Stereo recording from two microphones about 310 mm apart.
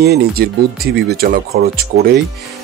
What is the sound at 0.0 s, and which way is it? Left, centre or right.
Speech, right.